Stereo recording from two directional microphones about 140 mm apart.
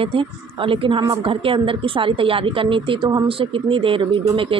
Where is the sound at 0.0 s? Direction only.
40° right (ahead or behind).